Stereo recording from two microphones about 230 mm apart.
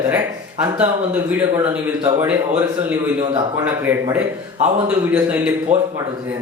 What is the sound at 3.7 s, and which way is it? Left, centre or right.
A man's voice, centre.